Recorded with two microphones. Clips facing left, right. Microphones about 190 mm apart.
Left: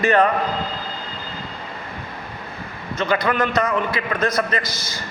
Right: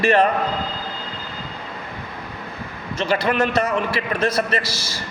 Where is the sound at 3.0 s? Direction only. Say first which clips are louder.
Even; 25° right (ahead or behind).